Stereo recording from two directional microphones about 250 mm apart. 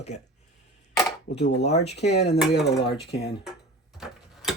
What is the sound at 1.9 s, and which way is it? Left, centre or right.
Speech, left.